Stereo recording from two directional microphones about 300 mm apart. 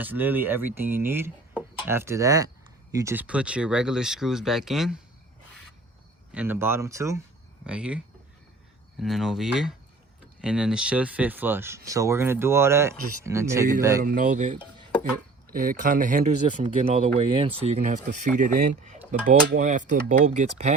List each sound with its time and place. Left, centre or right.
0.0 s speech: centre
6.3 s speech: centre
14.0 s speech: right